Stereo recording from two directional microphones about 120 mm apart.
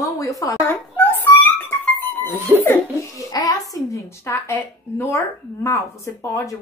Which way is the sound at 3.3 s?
30° left (ahead or behind).